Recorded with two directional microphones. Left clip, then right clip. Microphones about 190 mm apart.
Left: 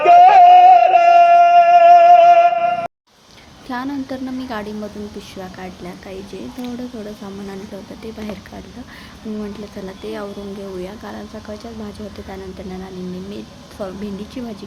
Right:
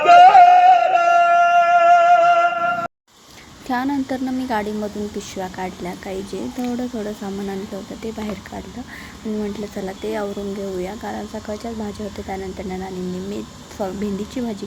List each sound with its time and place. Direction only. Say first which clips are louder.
0.0 s music: left 1 dB; 10° left (ahead or behind)
1.4 s music: left 5 dB; 25° left (ahead or behind)
1.6 s music: left 5 dB; 10° left (ahead or behind)
3.7 s speech: right 3 dB; 15° right (ahead or behind)
9.4 s speech: right 5 dB; 15° right (ahead or behind)